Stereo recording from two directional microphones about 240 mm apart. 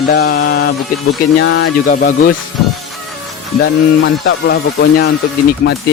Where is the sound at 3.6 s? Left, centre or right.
Left.